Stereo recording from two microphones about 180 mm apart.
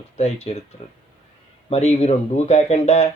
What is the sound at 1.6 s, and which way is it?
Speech, 35° left (ahead or behind).